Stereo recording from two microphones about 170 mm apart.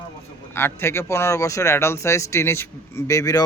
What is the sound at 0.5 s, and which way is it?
Speech, 15° left (ahead or behind).